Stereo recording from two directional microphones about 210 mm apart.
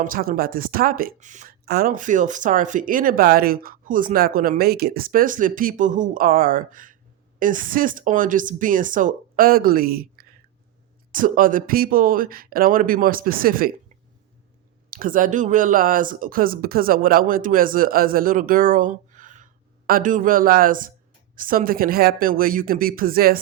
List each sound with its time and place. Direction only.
0.0 s speech: 45° right (ahead or behind)
1.6 s speech: 45° right (ahead or behind)
14.8 s speech: 40° right (ahead or behind)